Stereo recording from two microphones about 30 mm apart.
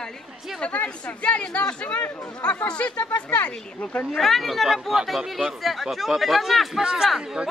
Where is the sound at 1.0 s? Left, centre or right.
Left.